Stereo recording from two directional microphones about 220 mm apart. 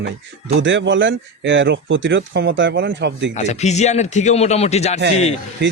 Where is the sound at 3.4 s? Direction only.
30° left (ahead or behind).